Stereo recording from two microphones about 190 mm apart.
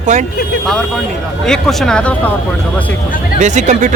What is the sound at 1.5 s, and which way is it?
Speech, 5° left (ahead or behind).